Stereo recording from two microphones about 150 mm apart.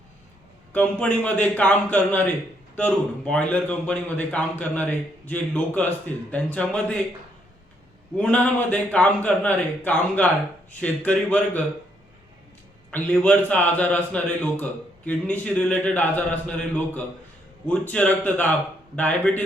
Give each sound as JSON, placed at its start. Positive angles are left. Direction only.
{"t": 0.7, "sound": "a man's voice", "side_deg": 10}
{"t": 8.1, "sound": "a man's voice", "side_deg": 10}
{"t": 12.9, "sound": "a man's voice", "side_deg": 10}